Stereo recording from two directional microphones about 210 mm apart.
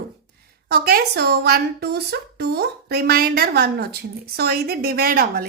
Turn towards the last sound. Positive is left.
turn(degrees=-45)  # may be behind; listen again after turning